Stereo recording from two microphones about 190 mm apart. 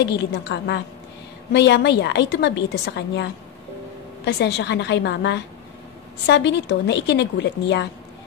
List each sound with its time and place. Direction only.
0.0 s a woman's voice: 60° left (ahead or behind)